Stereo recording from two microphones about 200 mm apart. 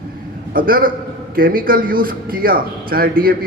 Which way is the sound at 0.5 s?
45° right (ahead or behind).